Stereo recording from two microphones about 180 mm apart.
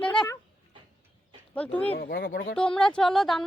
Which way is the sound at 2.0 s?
60° left (ahead or behind).